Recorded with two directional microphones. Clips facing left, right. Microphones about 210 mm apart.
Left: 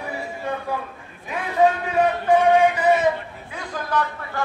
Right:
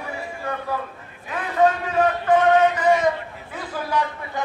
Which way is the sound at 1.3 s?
10° left (ahead or behind).